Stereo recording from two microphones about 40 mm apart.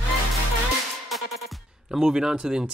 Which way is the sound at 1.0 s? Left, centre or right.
Centre.